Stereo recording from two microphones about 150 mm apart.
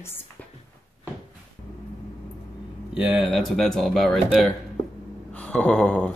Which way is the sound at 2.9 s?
5° right (ahead or behind).